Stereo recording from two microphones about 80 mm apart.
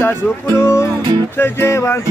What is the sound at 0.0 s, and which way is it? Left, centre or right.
Music, left.